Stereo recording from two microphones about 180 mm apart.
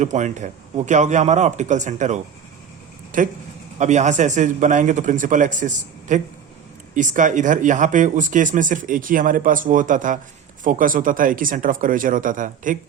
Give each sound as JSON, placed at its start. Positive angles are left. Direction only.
{"t": 0.0, "sound": "a man's voice", "side_deg": -40}
{"t": 3.1, "sound": "speech", "side_deg": -45}